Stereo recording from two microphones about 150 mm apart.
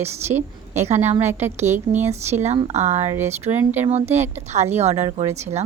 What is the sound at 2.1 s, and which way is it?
A woman's voice, 50° right (ahead or behind).